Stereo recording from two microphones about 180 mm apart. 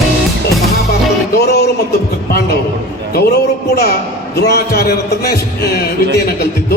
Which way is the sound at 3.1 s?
60° left (ahead or behind).